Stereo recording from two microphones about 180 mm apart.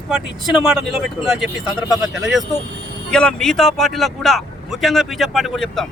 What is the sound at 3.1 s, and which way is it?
Speech, 5° left (ahead or behind).